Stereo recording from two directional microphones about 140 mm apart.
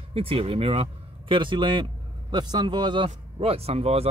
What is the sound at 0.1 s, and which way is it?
Speech, 40° right (ahead or behind).